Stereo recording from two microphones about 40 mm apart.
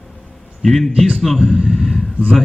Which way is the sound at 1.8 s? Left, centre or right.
Centre.